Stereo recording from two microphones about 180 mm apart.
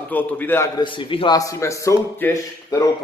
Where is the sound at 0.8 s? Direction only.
30° left (ahead or behind); by 2.8 s 10° left (ahead or behind).